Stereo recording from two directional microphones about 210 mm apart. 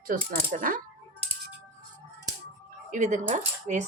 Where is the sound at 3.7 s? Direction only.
35° right (ahead or behind).